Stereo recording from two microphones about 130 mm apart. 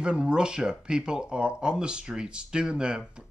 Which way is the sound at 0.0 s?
5° right (ahead or behind).